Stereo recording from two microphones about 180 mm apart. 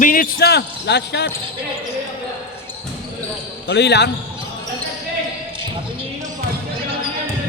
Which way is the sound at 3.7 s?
70° left (ahead or behind).